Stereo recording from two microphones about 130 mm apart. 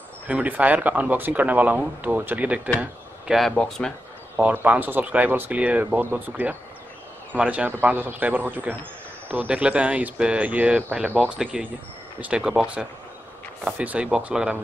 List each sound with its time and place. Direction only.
0.3 s speech: 10° right (ahead or behind)
4.4 s speech: 10° right (ahead or behind)